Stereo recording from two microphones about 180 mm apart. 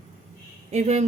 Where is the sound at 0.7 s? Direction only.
40° right (ahead or behind).